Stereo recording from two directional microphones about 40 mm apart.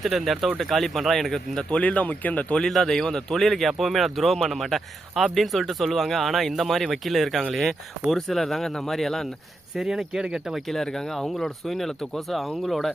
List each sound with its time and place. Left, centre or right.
0.0 s speech: centre
1.8 s speech: left
2.6 s speech: centre
9.7 s speech: centre
10.7 s speech: centre